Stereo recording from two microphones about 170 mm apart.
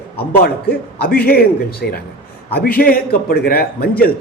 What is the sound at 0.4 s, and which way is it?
A man's voice, 65° left (ahead or behind).